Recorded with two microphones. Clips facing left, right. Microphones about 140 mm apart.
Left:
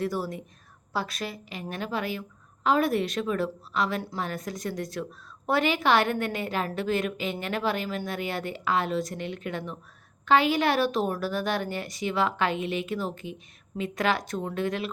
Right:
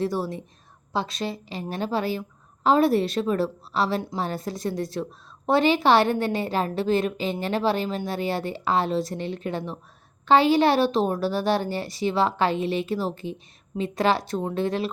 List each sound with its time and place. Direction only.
0.0 s a woman's voice: 25° right (ahead or behind)